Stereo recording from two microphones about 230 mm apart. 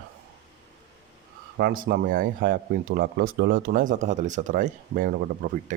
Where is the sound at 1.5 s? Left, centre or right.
Right.